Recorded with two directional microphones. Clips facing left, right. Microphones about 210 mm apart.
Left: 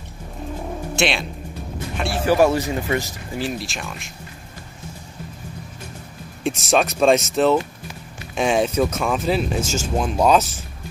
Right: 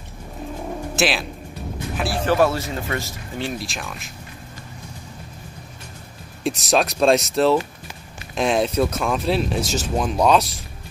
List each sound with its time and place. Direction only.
0.9 s speech: 5° right (ahead or behind)
2.2 s speech: 15° left (ahead or behind)
3.3 s speech: centre (ahead or behind)
6.4 s speech: centre (ahead or behind)